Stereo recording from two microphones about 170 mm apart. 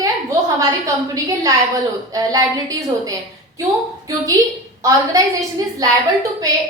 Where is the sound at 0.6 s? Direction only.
20° right (ahead or behind).